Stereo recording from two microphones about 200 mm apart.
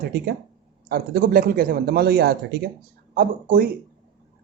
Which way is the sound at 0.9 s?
50° right (ahead or behind).